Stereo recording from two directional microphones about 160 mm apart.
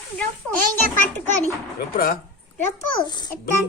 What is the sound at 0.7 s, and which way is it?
Speech, 15° left (ahead or behind).